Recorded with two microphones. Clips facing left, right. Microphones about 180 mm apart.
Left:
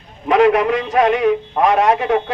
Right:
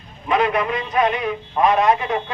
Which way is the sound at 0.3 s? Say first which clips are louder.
Left 7 dB; 85° left.